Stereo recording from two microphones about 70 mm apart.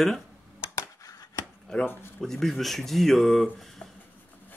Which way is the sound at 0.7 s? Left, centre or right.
Left.